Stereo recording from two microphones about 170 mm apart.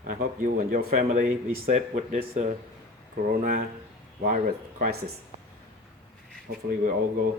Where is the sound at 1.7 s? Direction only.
40° right (ahead or behind).